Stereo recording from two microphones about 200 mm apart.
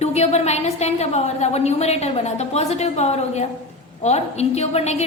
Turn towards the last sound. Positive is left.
turn(degrees=35)  # may be behind; listen again after turning